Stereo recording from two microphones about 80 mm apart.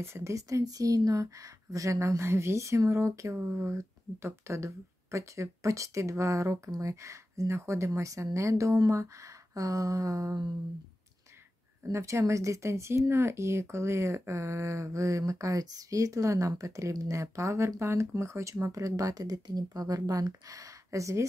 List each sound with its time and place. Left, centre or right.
0.0 s speech: right
11.8 s speech: right